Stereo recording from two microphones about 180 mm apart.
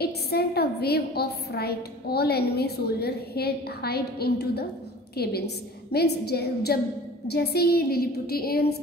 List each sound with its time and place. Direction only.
0.0 s a woman's voice: 60° left (ahead or behind)